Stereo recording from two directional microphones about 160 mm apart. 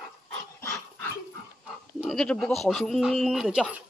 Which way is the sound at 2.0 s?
5° left (ahead or behind).